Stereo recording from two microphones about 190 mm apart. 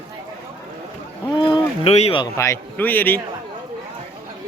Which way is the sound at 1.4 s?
30° left (ahead or behind).